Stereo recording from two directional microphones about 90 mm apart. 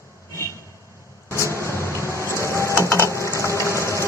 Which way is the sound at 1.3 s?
30° left (ahead or behind).